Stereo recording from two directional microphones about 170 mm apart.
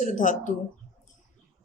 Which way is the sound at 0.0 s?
45° left (ahead or behind).